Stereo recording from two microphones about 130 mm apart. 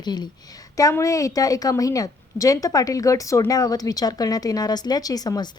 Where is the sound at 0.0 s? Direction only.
35° left (ahead or behind).